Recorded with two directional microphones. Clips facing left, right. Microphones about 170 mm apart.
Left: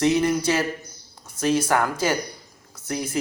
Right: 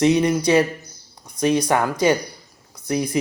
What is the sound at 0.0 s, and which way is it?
A man's voice, 20° right (ahead or behind).